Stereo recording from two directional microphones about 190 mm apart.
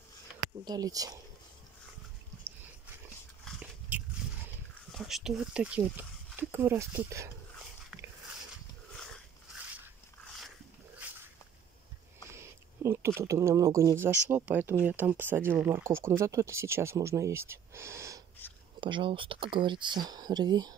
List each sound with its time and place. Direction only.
0.7 s speech: 20° right (ahead or behind)
3.4 s dog: 5° right (ahead or behind)
4.9 s speech: centre (ahead or behind)
8.9 s dog: centre (ahead or behind)
11.0 s a sound: 10° right (ahead or behind)
12.3 s a sound: 15° right (ahead or behind)
13.2 s speech: 15° right (ahead or behind)
18.8 s speech: 25° right (ahead or behind)